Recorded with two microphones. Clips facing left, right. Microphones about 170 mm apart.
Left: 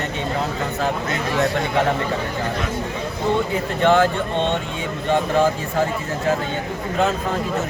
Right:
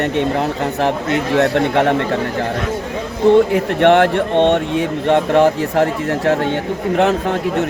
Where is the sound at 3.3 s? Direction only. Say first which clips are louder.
Right 9 dB; 80° right.